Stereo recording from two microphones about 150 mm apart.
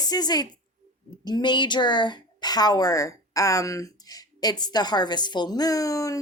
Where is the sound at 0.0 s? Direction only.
25° left (ahead or behind).